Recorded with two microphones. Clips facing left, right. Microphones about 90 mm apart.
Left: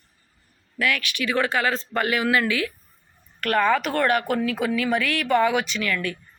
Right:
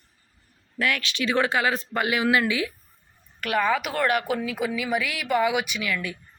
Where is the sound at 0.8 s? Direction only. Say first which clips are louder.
Left 1 dB; 25° right (ahead or behind).